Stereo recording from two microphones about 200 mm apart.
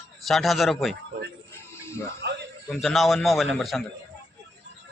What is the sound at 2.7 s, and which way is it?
Speech, centre (ahead or behind).